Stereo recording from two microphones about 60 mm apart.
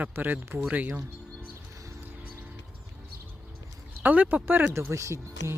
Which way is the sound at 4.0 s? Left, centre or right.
Right.